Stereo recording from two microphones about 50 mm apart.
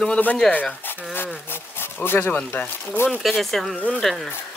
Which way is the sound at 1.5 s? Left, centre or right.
Left.